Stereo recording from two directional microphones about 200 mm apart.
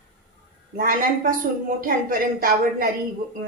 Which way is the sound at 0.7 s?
45° right (ahead or behind).